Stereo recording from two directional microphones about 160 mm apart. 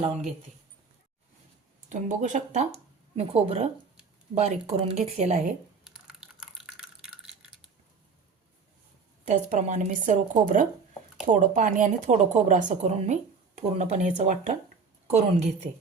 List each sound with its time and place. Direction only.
1.9 s a woman's voice: 50° right (ahead or behind)
5.8 s a sound: centre (ahead or behind)
9.2 s a woman's voice: 50° right (ahead or behind)